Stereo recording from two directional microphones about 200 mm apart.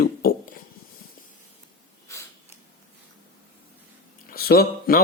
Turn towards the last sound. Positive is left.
turn(degrees=50)  # may be behind; listen again after turning